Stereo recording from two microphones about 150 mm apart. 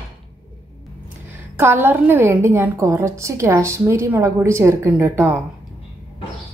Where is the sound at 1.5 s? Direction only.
15° right (ahead or behind).